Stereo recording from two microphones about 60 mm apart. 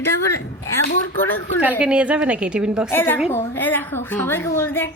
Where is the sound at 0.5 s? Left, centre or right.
Left.